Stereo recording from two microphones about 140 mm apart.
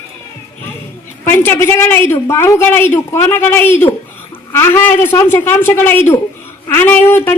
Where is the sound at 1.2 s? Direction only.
15° left (ahead or behind).